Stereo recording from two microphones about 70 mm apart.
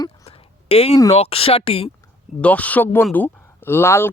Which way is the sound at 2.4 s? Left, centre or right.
Left.